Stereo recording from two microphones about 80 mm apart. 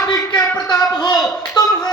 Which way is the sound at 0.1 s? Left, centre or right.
Left.